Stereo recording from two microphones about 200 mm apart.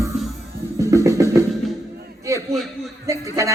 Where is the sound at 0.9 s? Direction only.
15° right (ahead or behind).